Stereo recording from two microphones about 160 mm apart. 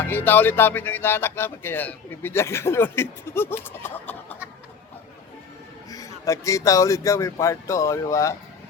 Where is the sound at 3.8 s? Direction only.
10° left (ahead or behind).